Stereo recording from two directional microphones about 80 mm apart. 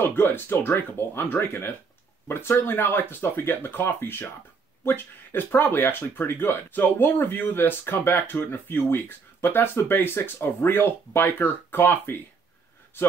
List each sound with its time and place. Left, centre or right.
0.0 s speech: left